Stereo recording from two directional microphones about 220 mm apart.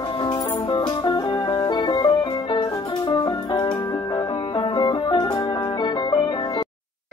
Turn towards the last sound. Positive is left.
turn(degrees=20)  # may be behind; listen again after turning